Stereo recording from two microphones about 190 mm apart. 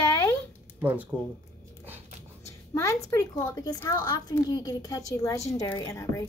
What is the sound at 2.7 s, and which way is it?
A woman's voice, 15° left (ahead or behind).